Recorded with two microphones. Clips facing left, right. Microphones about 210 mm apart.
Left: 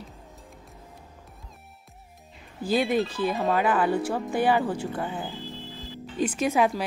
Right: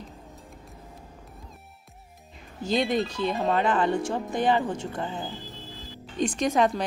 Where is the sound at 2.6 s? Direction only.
5° left (ahead or behind).